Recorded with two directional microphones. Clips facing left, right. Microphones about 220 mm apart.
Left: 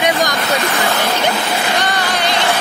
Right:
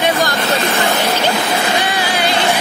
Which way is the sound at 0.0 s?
15° left (ahead or behind).